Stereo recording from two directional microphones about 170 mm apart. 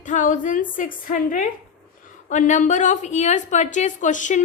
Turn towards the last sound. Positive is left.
turn(degrees=45)  # may be behind; listen again after turning